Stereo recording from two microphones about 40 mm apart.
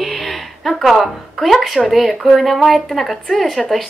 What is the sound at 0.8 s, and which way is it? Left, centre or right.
Speech, centre.